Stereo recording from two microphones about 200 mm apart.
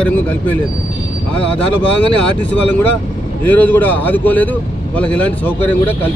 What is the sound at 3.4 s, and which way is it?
Speech, 10° left (ahead or behind).